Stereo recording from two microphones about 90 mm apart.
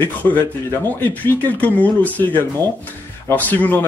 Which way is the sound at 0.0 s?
20° left (ahead or behind).